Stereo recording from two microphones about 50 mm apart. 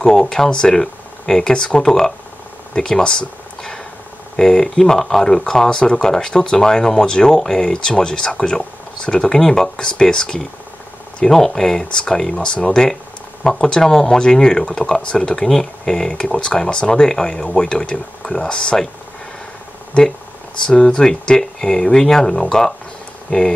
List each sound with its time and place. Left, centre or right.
0.0 s speech: centre
2.7 s a sound: centre
4.4 s speech: centre
20.6 s speech: centre